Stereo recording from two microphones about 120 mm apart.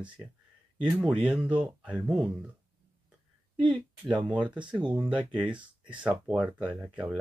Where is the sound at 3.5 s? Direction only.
45° right (ahead or behind).